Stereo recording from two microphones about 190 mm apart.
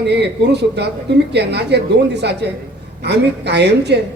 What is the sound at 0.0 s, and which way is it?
A woman's voice, 65° right (ahead or behind).